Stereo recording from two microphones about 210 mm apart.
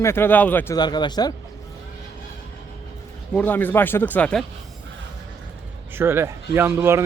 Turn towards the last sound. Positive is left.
turn(degrees=-10)  # may be behind; listen again after turning